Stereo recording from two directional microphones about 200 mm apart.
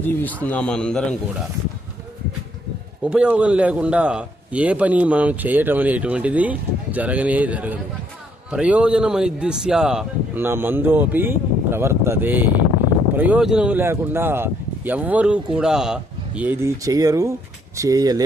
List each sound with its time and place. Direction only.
0.0 s a man's voice: 10° left (ahead or behind)
3.0 s a man's voice: 5° right (ahead or behind)